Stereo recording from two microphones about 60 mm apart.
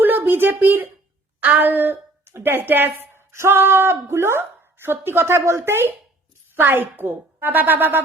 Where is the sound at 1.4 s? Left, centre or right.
Right.